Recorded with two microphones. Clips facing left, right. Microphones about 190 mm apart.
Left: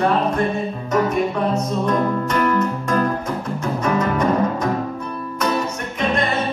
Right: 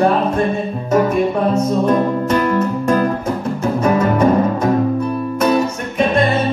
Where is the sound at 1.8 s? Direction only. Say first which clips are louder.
Right 5 dB; 30° right (ahead or behind).